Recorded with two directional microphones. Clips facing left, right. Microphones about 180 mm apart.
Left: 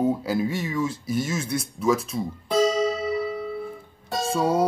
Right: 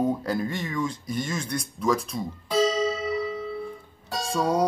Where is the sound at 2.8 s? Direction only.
35° left (ahead or behind).